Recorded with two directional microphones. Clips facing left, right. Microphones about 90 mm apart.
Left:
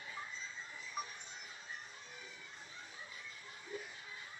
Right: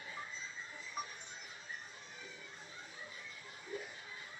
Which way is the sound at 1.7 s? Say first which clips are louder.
Right 2 dB; 35° right (ahead or behind).